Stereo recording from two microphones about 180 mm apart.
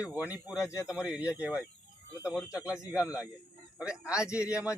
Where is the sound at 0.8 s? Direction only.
5° right (ahead or behind).